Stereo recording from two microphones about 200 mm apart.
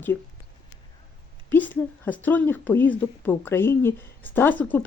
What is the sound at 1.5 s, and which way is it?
A woman's voice, 10° left (ahead or behind).